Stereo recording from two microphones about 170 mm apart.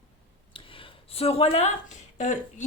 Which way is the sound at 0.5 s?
35° left (ahead or behind).